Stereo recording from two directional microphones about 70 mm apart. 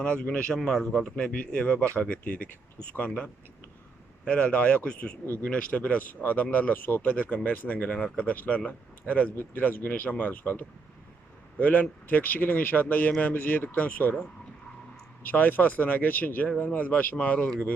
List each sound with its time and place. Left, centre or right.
0.0 s a man's voice: centre
4.3 s a man's voice: centre
15.2 s speech: left